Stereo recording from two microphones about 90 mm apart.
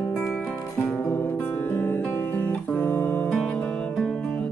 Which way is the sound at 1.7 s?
20° left (ahead or behind).